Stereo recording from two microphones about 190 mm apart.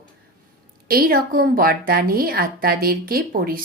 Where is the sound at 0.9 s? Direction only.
50° right (ahead or behind).